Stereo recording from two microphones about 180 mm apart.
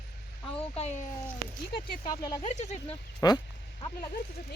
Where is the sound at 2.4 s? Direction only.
40° left (ahead or behind).